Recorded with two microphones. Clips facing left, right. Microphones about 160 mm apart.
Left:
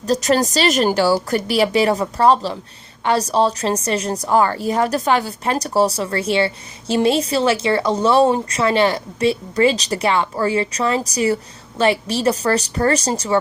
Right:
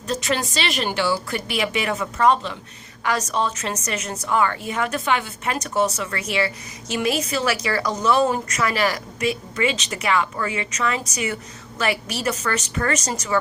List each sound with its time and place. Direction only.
0.0 s a woman's voice: 40° left (ahead or behind)